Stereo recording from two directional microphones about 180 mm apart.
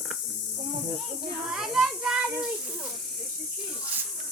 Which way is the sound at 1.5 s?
Centre (ahead or behind).